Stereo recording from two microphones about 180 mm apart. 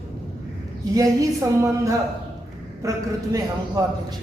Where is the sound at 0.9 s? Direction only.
20° right (ahead or behind).